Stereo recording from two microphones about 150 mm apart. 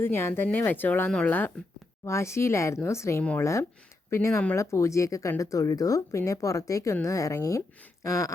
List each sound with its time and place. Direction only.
0.0 s speech: 15° left (ahead or behind)